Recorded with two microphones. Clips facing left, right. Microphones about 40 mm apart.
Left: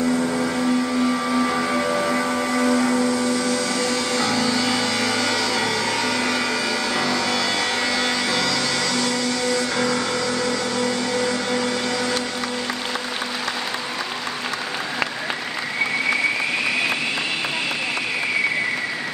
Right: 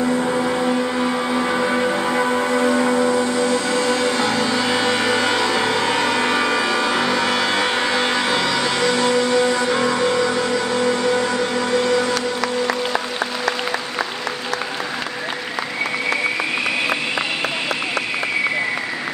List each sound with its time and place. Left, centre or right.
0.0 s vehicle: right